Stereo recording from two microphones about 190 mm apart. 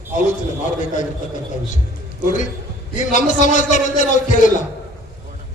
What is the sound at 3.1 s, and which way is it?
Speech, 40° left (ahead or behind).